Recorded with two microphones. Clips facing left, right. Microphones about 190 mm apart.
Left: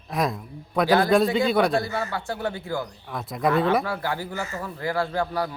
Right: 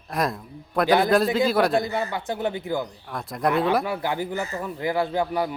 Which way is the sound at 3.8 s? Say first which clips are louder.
Right 2 dB; 20° right (ahead or behind).